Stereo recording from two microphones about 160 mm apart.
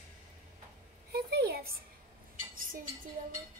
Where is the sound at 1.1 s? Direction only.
80° right.